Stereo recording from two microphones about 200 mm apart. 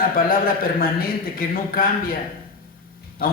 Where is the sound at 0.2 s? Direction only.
45° left (ahead or behind).